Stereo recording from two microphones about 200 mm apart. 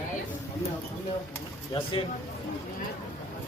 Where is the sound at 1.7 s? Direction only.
25° left (ahead or behind).